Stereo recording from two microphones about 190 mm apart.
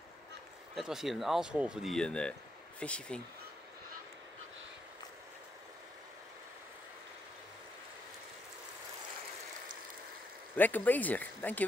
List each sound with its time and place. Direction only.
0.7 s speech: centre (ahead or behind)
10.5 s speech: 10° left (ahead or behind)